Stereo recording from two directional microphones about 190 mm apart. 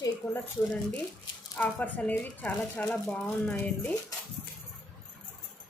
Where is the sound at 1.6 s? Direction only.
10° left (ahead or behind).